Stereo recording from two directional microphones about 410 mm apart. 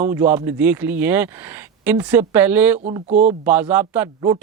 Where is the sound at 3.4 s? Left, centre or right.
Centre.